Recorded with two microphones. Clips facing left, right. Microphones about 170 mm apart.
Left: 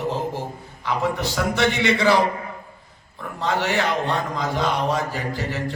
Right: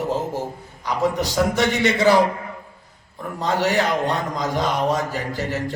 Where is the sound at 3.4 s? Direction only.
40° right (ahead or behind).